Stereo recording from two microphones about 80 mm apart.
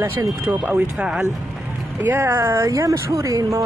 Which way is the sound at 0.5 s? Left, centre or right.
Right.